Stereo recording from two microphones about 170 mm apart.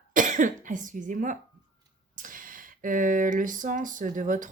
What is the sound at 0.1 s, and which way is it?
Speech, 50° right (ahead or behind).